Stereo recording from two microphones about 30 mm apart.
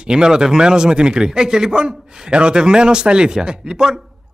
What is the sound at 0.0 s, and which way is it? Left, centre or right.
Speech, right.